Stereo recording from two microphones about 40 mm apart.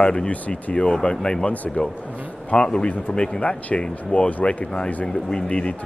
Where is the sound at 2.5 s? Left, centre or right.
Left.